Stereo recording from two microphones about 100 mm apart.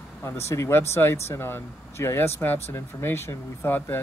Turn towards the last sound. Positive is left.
turn(degrees=20)  # may be behind; listen again after turning